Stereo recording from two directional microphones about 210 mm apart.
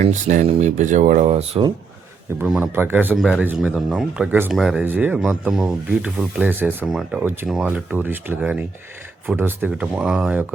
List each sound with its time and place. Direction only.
0.0 s speech: 35° right (ahead or behind)
2.4 s speech: 5° right (ahead or behind)